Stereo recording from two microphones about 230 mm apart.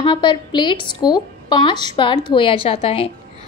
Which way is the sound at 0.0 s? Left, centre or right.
Centre.